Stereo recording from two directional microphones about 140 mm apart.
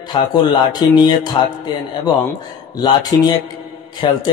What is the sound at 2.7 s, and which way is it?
Speech, 30° left (ahead or behind).